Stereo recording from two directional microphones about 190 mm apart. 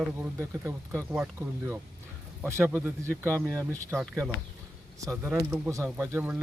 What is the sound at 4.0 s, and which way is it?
Speech, 5° right (ahead or behind).